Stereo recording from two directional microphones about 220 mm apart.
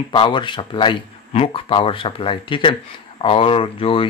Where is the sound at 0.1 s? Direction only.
20° left (ahead or behind).